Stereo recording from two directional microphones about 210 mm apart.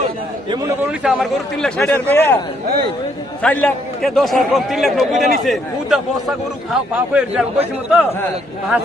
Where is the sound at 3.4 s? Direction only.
5° left (ahead or behind).